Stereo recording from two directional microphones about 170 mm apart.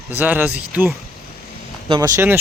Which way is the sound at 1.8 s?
25° right (ahead or behind).